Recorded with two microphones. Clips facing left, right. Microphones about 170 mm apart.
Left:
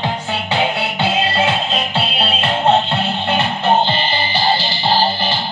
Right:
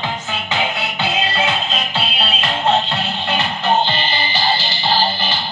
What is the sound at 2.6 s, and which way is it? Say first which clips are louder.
Music: left 3 dB; 55° left (ahead or behind).